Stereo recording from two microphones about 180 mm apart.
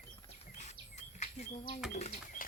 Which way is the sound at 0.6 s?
40° left (ahead or behind).